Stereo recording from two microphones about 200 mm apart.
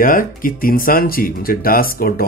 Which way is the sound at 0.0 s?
45° left (ahead or behind).